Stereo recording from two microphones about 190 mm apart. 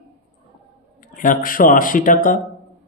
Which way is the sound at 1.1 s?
45° left (ahead or behind).